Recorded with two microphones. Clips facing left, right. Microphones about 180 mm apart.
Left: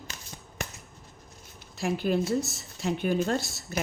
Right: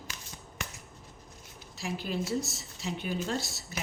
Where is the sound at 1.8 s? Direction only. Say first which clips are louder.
Left 7 dB; 55° left (ahead or behind).